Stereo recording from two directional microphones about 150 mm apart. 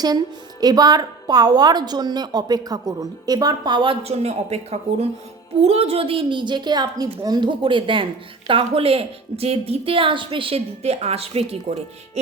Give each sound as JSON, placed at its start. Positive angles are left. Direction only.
{"t": 0.6, "sound": "a woman's voice", "side_deg": -25}